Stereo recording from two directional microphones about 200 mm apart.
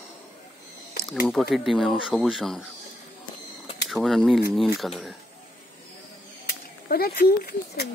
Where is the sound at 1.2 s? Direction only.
Centre (ahead or behind).